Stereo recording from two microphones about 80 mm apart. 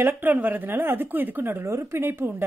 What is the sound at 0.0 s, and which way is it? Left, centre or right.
A woman's voice, right.